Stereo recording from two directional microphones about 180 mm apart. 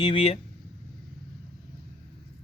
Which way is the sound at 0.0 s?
30° left (ahead or behind).